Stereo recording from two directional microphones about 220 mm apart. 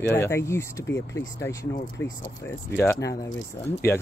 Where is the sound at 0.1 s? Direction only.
10° left (ahead or behind).